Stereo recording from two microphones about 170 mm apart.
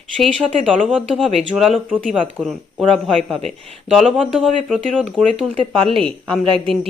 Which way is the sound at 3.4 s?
35° right (ahead or behind).